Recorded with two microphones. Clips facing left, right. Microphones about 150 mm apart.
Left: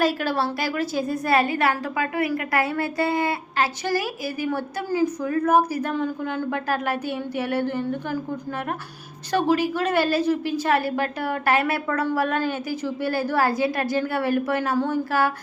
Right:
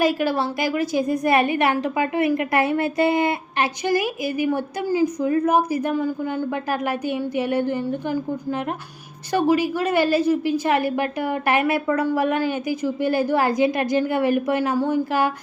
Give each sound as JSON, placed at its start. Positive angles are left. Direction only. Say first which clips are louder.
{"t": 0.0, "sound": "a woman's voice", "louder": "right 2 dB", "side_deg": -15}